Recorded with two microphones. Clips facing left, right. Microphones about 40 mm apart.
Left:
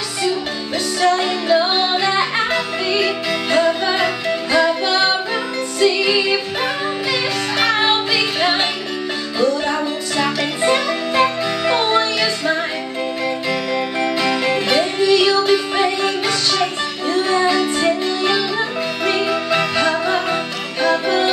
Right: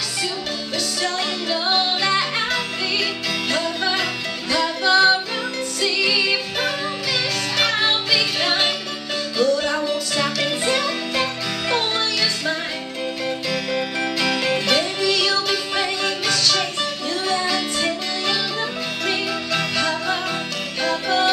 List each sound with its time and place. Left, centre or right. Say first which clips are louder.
1.0 s music: left 11 dB; left
7.7 s music: left 3 dB; left
13.9 s music: left 5 dB; left